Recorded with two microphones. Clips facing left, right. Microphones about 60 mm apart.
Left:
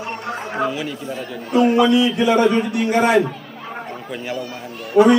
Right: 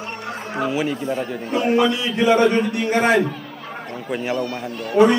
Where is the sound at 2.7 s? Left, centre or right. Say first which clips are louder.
Left 2 dB; right.